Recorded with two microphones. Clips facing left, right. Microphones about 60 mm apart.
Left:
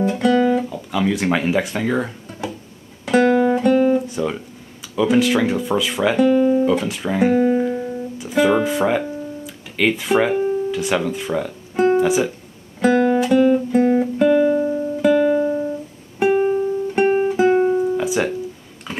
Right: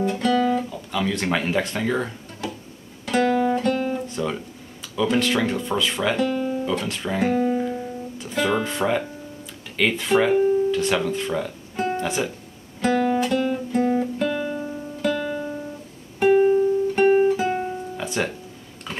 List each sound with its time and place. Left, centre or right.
0.0 s speech: centre
3.1 s guitar: centre
4.9 s speech: centre
7.4 s music: left
8.2 s speech: centre
11.7 s music: centre
12.8 s guitar: centre
16.2 s music: centre